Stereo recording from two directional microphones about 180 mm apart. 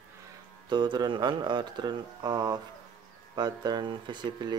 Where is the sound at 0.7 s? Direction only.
25° right (ahead or behind).